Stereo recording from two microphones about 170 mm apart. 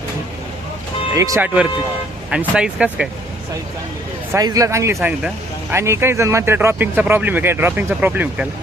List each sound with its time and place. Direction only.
1.1 s a man's voice: 20° right (ahead or behind)
2.3 s speech: 5° right (ahead or behind)
4.3 s a man's voice: 20° right (ahead or behind)